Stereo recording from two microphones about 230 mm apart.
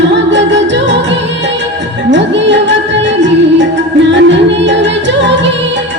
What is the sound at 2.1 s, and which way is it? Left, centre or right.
Music, right.